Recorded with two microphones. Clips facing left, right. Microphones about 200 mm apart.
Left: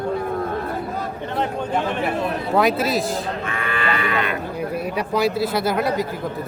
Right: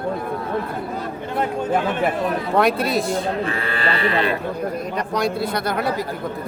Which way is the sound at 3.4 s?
35° right (ahead or behind).